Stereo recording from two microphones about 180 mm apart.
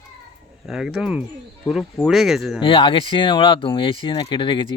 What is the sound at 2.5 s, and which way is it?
Speech, 30° left (ahead or behind).